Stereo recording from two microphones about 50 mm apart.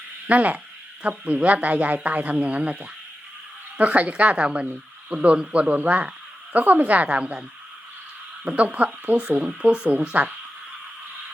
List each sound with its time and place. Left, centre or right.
0.3 s speech: right
8.4 s speech: right